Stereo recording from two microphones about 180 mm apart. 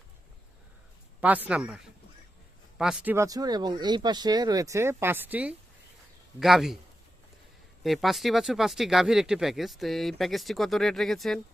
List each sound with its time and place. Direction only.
1.2 s speech: 10° right (ahead or behind)
7.9 s speech: centre (ahead or behind)